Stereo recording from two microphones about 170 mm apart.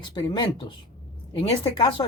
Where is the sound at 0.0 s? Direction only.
25° left (ahead or behind).